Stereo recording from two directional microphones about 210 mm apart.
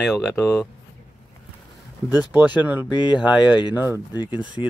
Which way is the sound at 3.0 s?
20° left (ahead or behind).